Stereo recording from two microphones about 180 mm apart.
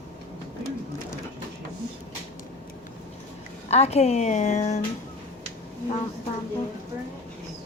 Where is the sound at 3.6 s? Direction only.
35° left (ahead or behind).